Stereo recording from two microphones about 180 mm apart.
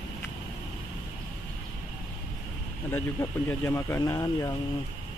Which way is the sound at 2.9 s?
15° left (ahead or behind).